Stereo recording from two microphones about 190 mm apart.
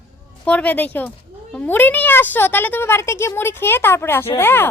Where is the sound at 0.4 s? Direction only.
10° left (ahead or behind).